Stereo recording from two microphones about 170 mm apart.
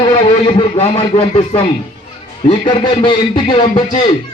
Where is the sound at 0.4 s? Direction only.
35° left (ahead or behind).